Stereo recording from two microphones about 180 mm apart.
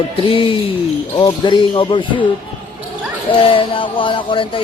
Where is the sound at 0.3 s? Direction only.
30° left (ahead or behind).